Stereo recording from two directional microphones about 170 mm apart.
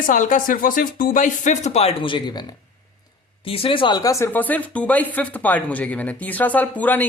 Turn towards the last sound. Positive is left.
turn(degrees=10)  # may be behind; listen again after turning